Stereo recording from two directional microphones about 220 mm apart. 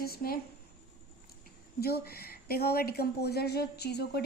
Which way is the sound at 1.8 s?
45° left (ahead or behind).